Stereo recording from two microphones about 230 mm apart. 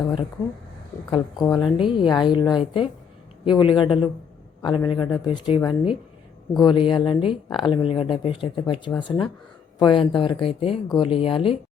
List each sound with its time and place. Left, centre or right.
0.0 s a woman's voice: centre